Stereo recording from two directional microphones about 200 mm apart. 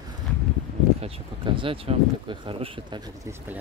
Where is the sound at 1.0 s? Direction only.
25° right (ahead or behind).